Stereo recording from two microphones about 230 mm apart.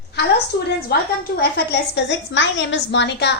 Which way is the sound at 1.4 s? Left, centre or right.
Left.